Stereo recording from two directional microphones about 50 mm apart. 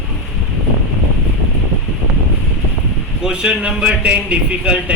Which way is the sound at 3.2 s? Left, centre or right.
Centre.